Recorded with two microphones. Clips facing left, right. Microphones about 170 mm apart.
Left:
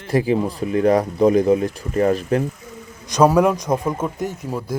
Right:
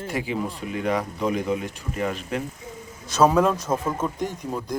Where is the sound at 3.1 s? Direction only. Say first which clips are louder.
Left 4 dB; 15° left (ahead or behind).